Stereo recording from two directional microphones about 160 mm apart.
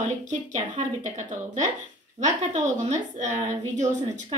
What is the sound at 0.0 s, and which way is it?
Speech, 50° right (ahead or behind).